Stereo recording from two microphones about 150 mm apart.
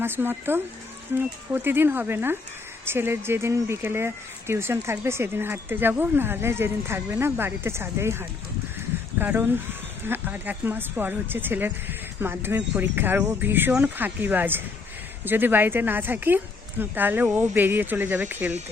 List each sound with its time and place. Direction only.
0.0 s speech: 15° right (ahead or behind)